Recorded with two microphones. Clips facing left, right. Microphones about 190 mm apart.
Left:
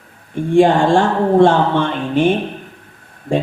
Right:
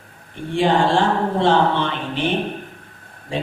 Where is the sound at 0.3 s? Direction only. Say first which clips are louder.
Left 6 dB; 45° left (ahead or behind).